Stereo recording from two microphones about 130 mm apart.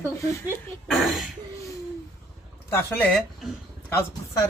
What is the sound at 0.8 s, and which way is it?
Speech, centre (ahead or behind).